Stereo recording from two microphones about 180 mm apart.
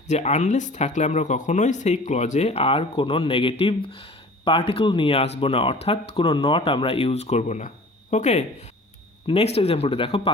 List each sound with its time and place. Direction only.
0.1 s speech: 40° left (ahead or behind)